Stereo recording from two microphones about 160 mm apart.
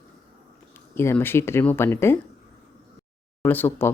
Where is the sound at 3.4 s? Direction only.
10° left (ahead or behind).